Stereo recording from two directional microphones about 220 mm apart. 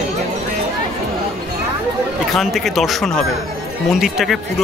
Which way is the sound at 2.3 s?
Centre (ahead or behind).